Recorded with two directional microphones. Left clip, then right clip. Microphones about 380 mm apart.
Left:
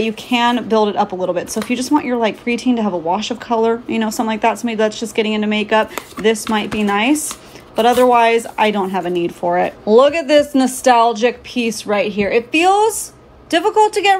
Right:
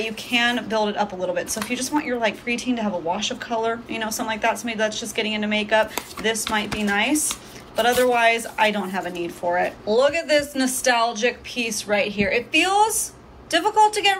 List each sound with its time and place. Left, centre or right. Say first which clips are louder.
0.0 s speech: left 5 dB; centre